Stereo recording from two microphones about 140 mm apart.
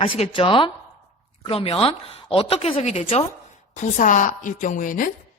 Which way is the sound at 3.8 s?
65° left (ahead or behind).